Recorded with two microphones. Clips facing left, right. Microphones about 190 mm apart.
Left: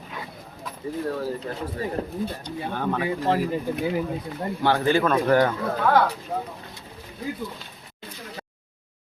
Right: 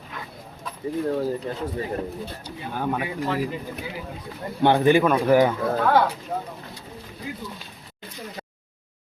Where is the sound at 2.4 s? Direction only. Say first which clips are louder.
Right 4 dB; 10° right (ahead or behind).